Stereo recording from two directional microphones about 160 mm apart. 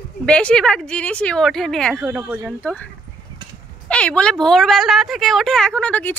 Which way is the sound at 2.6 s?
10° left (ahead or behind).